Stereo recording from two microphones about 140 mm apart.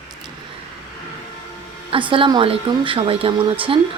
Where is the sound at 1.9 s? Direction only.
35° right (ahead or behind).